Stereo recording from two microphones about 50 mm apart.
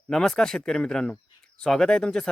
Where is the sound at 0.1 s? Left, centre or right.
Centre.